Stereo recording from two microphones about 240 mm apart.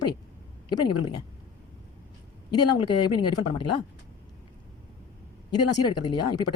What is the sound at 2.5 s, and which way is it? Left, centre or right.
Speech, centre.